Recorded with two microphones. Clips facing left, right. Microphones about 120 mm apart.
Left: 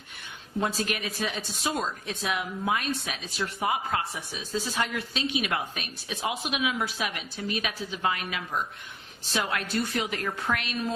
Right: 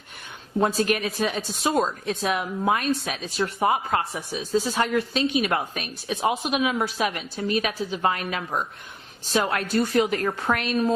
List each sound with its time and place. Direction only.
0.6 s speech: 40° right (ahead or behind)